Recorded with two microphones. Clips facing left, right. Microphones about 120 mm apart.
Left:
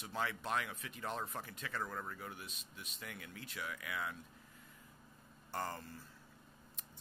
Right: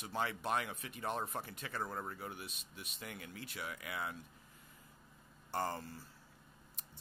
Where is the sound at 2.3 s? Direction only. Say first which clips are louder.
Right 2 dB; 5° right (ahead or behind).